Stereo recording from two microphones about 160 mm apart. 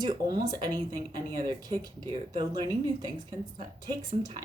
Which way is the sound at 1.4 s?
25° right (ahead or behind).